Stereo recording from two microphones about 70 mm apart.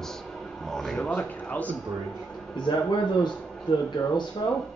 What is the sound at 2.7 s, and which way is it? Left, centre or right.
Speech, left.